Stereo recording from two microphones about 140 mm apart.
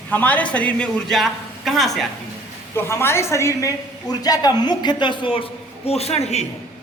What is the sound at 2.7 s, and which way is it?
A woman's voice, 15° left (ahead or behind).